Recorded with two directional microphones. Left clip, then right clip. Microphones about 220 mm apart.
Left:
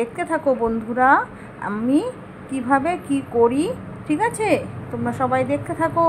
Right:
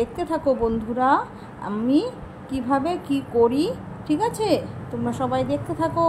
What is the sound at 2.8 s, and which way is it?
A woman's voice, 25° left (ahead or behind).